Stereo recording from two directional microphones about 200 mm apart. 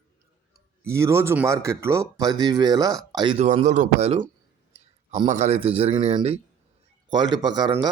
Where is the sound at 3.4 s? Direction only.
35° right (ahead or behind).